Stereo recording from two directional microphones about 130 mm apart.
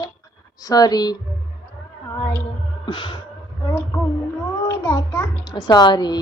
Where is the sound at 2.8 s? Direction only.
35° left (ahead or behind).